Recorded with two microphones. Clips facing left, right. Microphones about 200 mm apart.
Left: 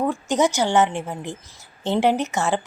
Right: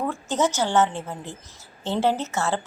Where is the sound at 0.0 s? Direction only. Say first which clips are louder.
Left 4 dB; 15° left (ahead or behind).